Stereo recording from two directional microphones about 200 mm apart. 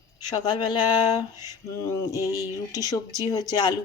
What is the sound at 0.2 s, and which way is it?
Speech, 20° left (ahead or behind).